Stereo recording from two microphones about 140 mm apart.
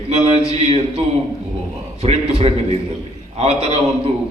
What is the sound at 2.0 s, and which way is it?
A man's voice, 45° right (ahead or behind).